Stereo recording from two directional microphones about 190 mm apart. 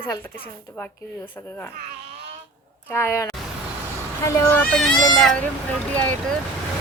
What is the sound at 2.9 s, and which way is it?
A woman's voice, 15° left (ahead or behind).